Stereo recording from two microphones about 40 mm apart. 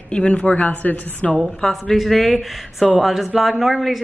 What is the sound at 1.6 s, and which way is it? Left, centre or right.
Speech, centre.